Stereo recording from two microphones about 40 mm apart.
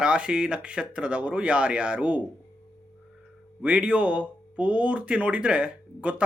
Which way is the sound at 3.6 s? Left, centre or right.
Right.